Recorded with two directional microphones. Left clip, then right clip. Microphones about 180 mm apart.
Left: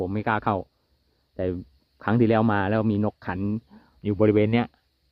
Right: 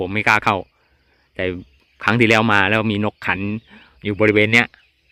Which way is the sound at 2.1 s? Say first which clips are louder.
Right 7 dB; 5° right (ahead or behind).